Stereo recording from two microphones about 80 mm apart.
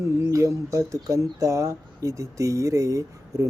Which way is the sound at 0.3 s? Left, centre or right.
Right.